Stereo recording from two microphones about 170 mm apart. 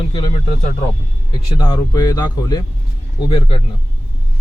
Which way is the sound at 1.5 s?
25° left (ahead or behind).